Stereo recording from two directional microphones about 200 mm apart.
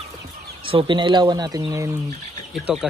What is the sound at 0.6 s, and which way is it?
Speech, 25° right (ahead or behind).